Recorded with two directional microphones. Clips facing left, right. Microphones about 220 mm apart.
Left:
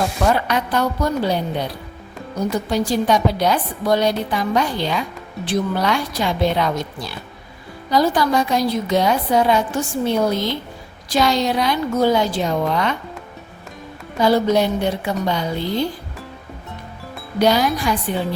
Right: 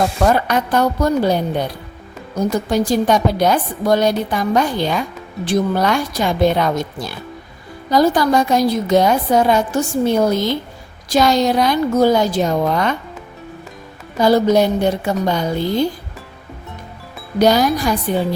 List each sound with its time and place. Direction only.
0.3 s a woman's voice: 45° right (ahead or behind)
2.6 s a woman's voice: 45° right (ahead or behind)
14.2 s a woman's voice: 40° right (ahead or behind)
17.4 s speech: 40° right (ahead or behind)